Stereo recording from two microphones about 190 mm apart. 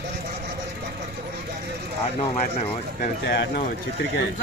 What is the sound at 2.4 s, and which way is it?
Speech, 40° left (ahead or behind).